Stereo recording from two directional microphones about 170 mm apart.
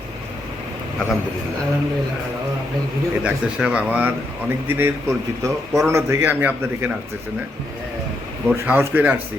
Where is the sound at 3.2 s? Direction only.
5° right (ahead or behind).